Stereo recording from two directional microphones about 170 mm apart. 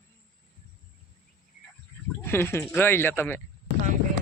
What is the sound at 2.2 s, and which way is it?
Speech, 15° left (ahead or behind).